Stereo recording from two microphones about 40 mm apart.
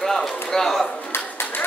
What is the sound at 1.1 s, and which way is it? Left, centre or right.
Clapping, left.